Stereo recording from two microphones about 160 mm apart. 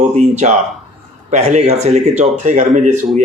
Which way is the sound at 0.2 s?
45° right (ahead or behind).